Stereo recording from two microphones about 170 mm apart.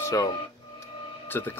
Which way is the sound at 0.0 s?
20° left (ahead or behind).